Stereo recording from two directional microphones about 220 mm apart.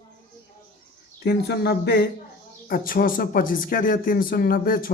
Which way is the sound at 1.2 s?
45° left (ahead or behind).